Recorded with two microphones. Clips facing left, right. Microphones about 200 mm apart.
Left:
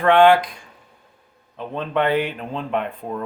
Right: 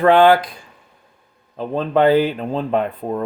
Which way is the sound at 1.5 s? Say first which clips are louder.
Right 5 dB; 35° right (ahead or behind).